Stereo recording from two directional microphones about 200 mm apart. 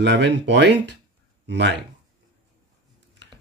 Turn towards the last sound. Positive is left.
turn(degrees=-60)  # may be behind; listen again after turning